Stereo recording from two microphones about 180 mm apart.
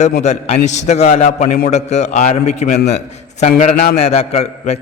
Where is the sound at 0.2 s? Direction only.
35° left (ahead or behind).